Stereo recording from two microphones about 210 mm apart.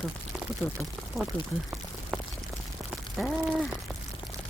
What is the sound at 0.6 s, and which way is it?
Speech, 10° left (ahead or behind).